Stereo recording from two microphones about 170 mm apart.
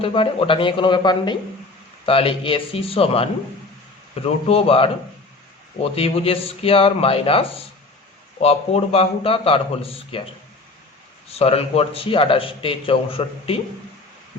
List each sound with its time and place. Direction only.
0.0 s a man's voice: 30° left (ahead or behind)
11.3 s a man's voice: 35° left (ahead or behind)